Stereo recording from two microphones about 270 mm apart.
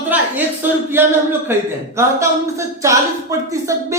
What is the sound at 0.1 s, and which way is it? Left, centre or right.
Speech, centre.